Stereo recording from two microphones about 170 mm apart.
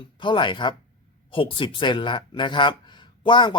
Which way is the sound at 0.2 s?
30° left (ahead or behind).